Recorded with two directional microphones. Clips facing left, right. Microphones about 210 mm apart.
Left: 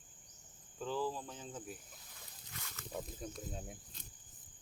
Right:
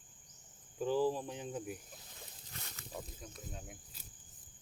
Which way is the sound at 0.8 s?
15° right (ahead or behind).